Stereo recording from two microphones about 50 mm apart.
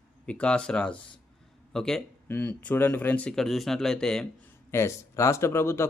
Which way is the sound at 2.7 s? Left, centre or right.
Left.